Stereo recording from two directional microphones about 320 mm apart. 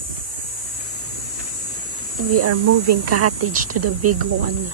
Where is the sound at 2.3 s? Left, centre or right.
Right.